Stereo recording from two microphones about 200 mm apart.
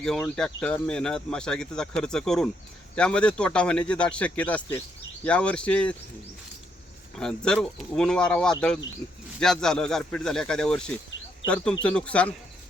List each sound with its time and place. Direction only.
0.0 s speech: 5° left (ahead or behind)
7.2 s speech: 5° left (ahead or behind)